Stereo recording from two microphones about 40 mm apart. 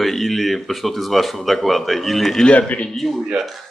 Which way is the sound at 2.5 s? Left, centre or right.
Left.